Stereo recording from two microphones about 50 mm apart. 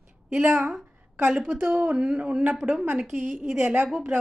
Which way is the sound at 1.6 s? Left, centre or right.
Right.